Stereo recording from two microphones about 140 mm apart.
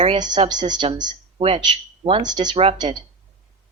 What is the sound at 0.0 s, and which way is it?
A woman's voice, 35° right (ahead or behind).